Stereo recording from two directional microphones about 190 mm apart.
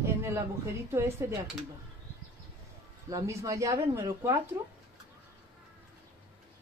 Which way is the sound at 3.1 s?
15° right (ahead or behind).